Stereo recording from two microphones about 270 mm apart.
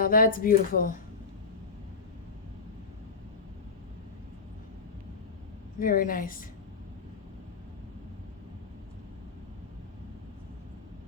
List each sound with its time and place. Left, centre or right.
0.0 s speech: left
5.8 s speech: left